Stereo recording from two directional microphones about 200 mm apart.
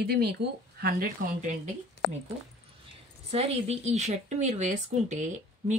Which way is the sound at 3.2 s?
30° right (ahead or behind).